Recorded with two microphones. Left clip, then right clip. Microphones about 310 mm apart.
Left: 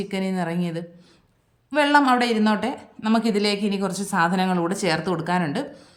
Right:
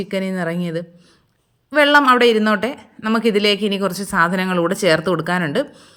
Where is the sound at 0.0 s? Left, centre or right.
Centre.